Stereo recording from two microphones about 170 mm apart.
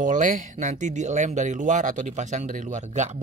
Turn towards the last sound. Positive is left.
turn(degrees=-45)  # may be behind; listen again after turning